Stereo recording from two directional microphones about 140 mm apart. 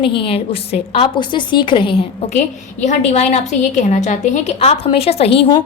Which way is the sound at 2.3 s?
55° left (ahead or behind).